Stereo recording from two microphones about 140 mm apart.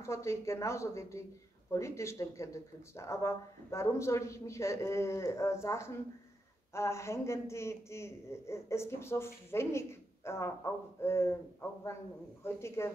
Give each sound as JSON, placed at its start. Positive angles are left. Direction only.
{"t": 0.0, "sound": "a man's voice", "side_deg": 20}
{"t": 12.4, "sound": "a man's voice", "side_deg": 20}